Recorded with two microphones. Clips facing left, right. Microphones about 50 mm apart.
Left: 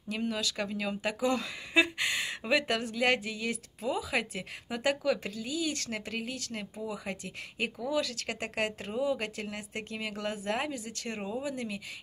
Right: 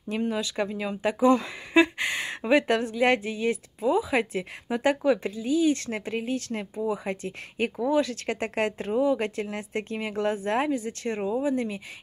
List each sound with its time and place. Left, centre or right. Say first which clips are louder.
0.1 s a woman's voice: right 5 dB; right